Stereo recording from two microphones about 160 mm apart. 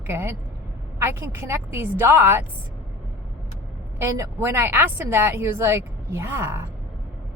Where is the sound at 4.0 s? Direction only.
15° right (ahead or behind).